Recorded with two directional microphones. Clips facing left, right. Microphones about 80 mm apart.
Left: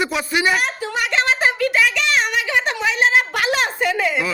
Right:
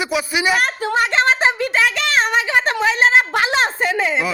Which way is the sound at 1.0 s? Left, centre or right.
Right.